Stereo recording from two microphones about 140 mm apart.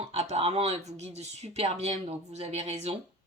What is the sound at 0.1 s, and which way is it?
Speech, 50° right (ahead or behind).